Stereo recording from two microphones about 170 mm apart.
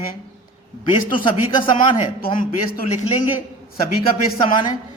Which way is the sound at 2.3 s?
60° left (ahead or behind).